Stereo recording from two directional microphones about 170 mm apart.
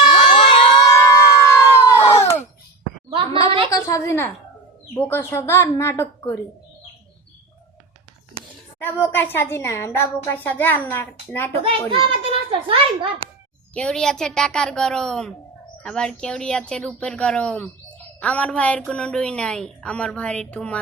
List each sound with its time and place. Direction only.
0.3 s a sound: 30° left (ahead or behind)
3.4 s a sound: 35° right (ahead or behind)
3.7 s a woman's voice: 20° left (ahead or behind)
8.8 s a woman's voice: 10° left (ahead or behind)
11.9 s a child's voice: 30° right (ahead or behind)
13.7 s a woman's voice: 5° left (ahead or behind)